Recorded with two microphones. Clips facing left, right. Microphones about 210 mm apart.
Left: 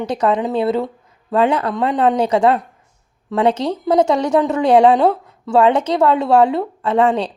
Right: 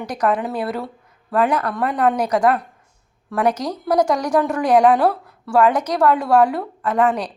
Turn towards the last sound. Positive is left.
turn(degrees=25)  # may be behind; listen again after turning